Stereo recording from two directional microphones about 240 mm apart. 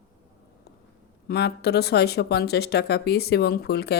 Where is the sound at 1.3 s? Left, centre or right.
Left.